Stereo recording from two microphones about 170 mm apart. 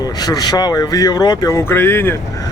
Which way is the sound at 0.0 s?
20° left (ahead or behind).